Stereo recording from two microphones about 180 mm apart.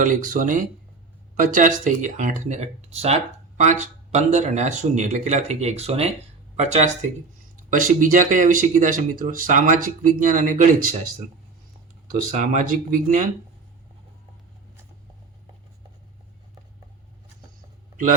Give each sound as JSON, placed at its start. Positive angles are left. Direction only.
{"t": 0.0, "sound": "speech", "side_deg": -45}
{"t": 12.3, "sound": "speech", "side_deg": -45}